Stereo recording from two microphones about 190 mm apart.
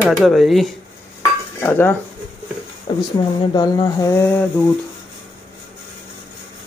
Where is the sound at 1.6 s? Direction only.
10° left (ahead or behind).